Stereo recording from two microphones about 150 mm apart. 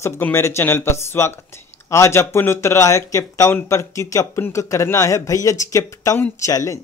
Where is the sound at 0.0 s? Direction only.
15° left (ahead or behind).